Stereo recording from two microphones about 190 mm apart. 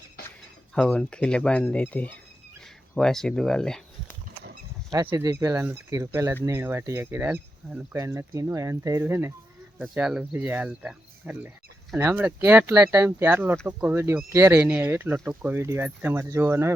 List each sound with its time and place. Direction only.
0.2 s a sound: 55° left (ahead or behind)
0.7 s speech: 5° left (ahead or behind)
5.0 s speech: 15° right (ahead or behind)